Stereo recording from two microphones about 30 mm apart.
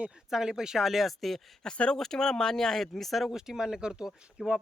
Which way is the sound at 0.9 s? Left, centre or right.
Centre.